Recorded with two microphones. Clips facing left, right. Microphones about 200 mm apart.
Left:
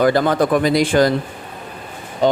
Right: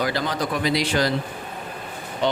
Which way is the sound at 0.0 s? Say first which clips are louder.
Left 10 dB; 50° left (ahead or behind).